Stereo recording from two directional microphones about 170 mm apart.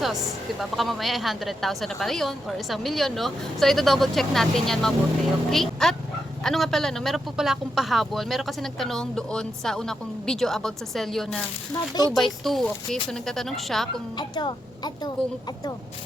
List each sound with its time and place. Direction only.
0.6 s speech: centre (ahead or behind)
11.7 s a woman's voice: 25° left (ahead or behind)
12.1 s speech: centre (ahead or behind)
14.2 s a woman's voice: 25° left (ahead or behind)